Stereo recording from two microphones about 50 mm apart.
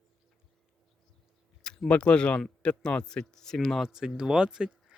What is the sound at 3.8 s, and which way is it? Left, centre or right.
Speech, centre.